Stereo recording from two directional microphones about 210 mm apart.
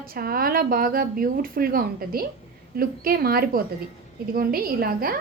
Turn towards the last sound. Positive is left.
turn(degrees=-45)  # may be behind; listen again after turning